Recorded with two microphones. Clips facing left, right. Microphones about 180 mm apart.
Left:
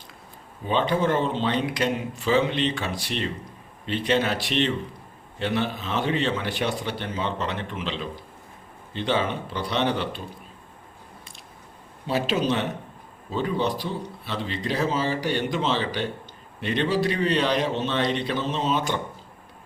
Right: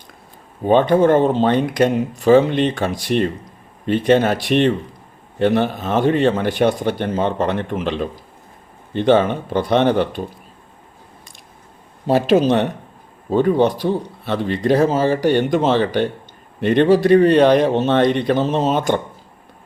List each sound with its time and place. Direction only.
0.6 s speech: 50° right (ahead or behind)
12.0 s speech: 50° right (ahead or behind)